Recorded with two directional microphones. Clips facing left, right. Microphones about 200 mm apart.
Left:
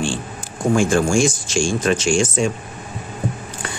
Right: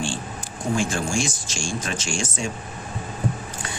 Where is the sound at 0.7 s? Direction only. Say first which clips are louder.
Left 9 dB; 50° left (ahead or behind); by 2.1 s 65° left (ahead or behind).